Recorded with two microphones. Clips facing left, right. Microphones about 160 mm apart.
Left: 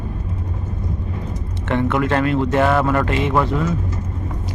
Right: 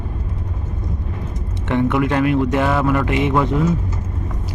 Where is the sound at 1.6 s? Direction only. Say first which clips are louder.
Right 1 dB; 15° right (ahead or behind).